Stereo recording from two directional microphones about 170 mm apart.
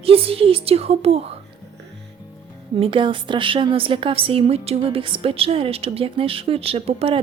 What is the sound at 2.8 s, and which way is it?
A woman's voice, 30° right (ahead or behind).